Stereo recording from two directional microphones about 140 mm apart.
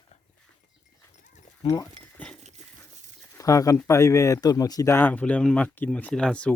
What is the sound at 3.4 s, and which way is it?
Speech, 25° left (ahead or behind).